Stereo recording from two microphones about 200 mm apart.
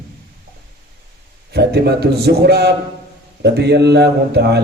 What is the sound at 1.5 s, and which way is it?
A man's voice, 55° right (ahead or behind).